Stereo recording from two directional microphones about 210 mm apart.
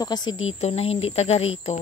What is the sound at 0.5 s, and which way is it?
Speech, 30° left (ahead or behind).